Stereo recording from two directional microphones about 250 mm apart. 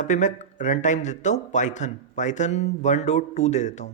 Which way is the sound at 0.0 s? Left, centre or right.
Left.